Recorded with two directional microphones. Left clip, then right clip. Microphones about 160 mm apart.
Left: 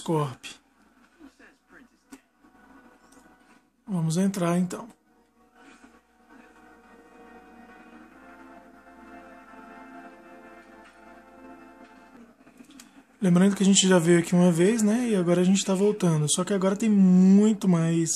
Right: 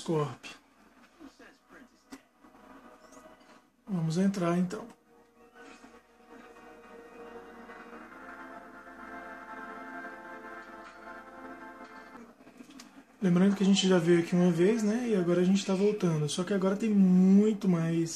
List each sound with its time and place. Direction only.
0.0 s speech: 50° left (ahead or behind)
3.9 s speech: 50° left (ahead or behind)
12.7 s speech: 45° left (ahead or behind)